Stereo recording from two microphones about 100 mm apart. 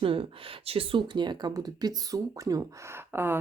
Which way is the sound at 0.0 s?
60° right (ahead or behind).